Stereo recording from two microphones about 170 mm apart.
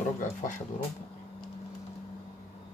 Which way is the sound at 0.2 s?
50° left (ahead or behind).